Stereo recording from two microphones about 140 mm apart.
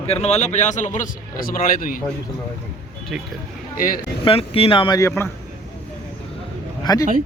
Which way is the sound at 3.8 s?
90° left.